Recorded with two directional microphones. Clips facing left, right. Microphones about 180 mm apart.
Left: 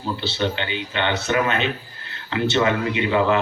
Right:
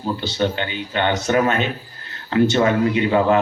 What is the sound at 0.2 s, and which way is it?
Speech, 45° right (ahead or behind).